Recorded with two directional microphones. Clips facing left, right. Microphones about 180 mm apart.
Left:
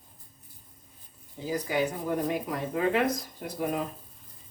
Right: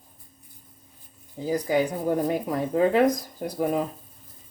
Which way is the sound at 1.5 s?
40° right (ahead or behind).